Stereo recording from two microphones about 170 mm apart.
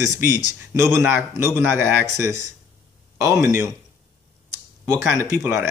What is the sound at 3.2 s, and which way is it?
Speech, 15° right (ahead or behind).